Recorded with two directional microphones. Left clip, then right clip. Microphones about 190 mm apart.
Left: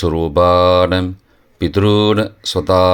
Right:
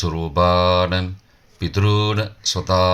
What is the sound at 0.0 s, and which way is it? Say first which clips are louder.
Speech: left 6 dB; 45° left (ahead or behind).